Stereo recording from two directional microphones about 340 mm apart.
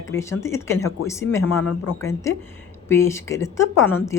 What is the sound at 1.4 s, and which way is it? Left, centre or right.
Speech, left.